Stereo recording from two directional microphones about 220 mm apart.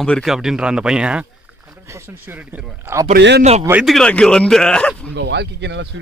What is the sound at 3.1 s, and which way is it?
Speech, 50° right (ahead or behind).